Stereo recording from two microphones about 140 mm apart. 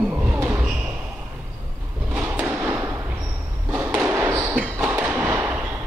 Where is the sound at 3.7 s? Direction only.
10° right (ahead or behind).